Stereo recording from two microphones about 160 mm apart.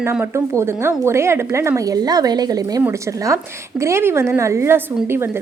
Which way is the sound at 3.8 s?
15° right (ahead or behind).